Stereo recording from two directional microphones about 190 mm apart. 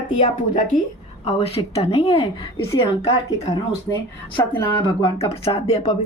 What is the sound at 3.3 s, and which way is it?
A woman's voice, 20° left (ahead or behind).